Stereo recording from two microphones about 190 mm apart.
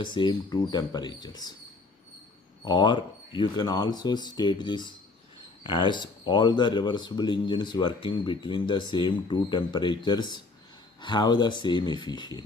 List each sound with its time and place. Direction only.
0.0 s speech: 25° left (ahead or behind)
2.6 s speech: 25° left (ahead or behind)